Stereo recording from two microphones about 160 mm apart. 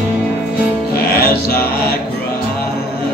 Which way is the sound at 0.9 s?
75° left (ahead or behind).